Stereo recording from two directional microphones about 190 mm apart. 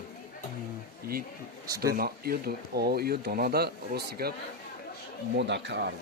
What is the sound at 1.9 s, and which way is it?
Speech, 50° right (ahead or behind).